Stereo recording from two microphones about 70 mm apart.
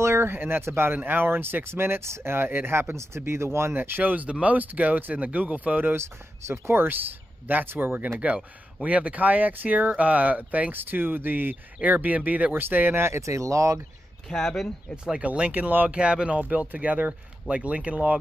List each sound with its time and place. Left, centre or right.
0.0 s speech: right
14.3 s speech: centre
15.1 s speech: centre